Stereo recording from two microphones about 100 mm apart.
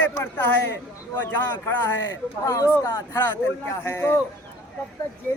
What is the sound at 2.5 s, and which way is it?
A man's voice, 30° left (ahead or behind).